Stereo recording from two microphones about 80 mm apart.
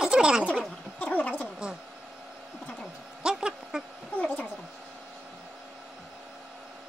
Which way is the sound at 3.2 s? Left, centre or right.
Centre.